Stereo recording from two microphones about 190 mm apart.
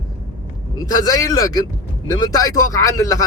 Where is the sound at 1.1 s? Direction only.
20° left (ahead or behind).